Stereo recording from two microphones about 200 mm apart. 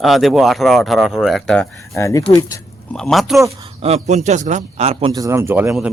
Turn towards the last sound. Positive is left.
turn(degrees=-5)  # may be behind; listen again after turning